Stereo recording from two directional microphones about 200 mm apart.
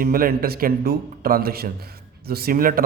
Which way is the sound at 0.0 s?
45° right (ahead or behind).